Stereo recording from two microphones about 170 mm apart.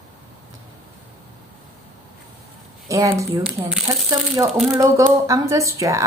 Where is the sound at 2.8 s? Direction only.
20° right (ahead or behind).